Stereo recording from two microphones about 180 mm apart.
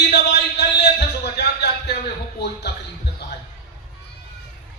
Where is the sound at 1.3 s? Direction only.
70° left (ahead or behind).